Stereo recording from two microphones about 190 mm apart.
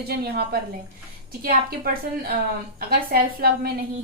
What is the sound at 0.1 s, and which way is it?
A woman's voice, 55° right (ahead or behind).